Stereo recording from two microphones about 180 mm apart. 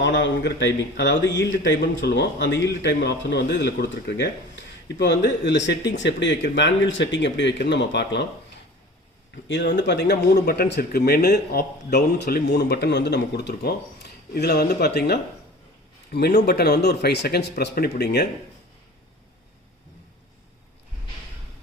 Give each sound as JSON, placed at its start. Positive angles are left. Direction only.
{"t": 0.0, "sound": "a man's voice", "side_deg": 85}
{"t": 9.5, "sound": "speech", "side_deg": 80}